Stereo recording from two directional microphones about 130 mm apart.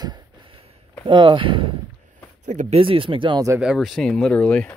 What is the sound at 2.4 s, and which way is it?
Speech, 65° right (ahead or behind).